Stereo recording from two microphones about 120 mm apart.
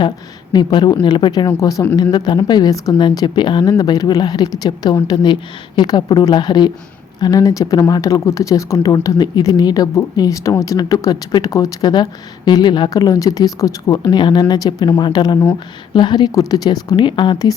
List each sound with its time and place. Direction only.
0.5 s speech: 40° left (ahead or behind)
1.5 s speech: 30° left (ahead or behind)
14.0 s speech: 40° left (ahead or behind)